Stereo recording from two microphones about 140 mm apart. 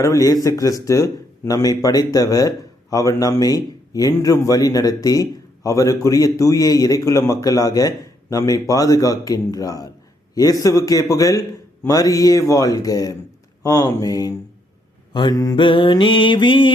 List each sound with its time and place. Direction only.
0.0 s a man's voice: 25° left (ahead or behind)
15.1 s mantra: 30° left (ahead or behind)